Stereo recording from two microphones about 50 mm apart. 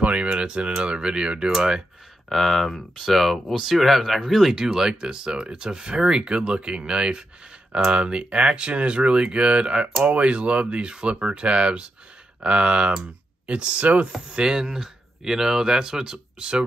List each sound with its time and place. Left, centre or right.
0.0 s speech: right
2.2 s speech: centre; by 14.0 s right
14.3 s speech: centre